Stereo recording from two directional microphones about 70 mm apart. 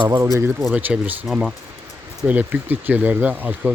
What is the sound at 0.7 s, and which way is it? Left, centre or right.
Speech, right.